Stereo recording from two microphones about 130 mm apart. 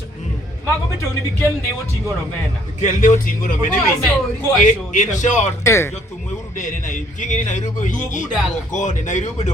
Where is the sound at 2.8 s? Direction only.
80° left.